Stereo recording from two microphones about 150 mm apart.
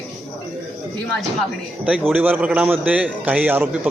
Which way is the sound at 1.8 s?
10° right (ahead or behind).